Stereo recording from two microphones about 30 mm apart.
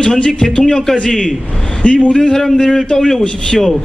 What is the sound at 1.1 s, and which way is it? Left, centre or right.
Speech, left.